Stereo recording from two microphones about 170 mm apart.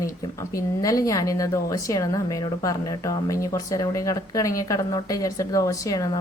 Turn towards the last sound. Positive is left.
turn(degrees=20)  # may be behind; listen again after turning